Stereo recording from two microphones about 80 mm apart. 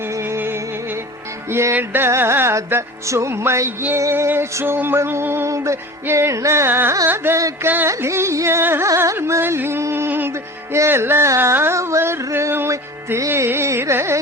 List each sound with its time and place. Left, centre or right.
0.2 s music: right
7.9 s music: right